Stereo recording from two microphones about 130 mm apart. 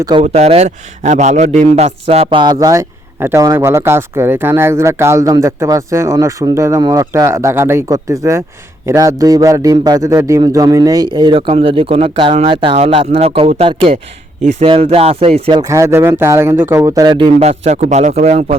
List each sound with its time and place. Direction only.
0.2 s a man's voice: 55° right (ahead or behind)
2.4 s speech: 30° right (ahead or behind)
11.3 s speech: 45° right (ahead or behind)
15.5 s speech: 25° right (ahead or behind)
17.4 s a man's voice: 55° right (ahead or behind)